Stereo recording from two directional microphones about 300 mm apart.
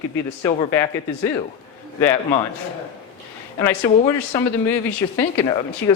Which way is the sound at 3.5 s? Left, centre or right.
Centre.